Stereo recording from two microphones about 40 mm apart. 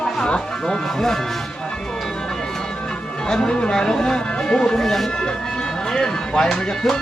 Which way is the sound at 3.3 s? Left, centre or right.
Centre.